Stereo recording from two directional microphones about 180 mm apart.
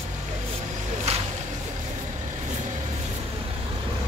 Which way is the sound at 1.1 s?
35° right (ahead or behind).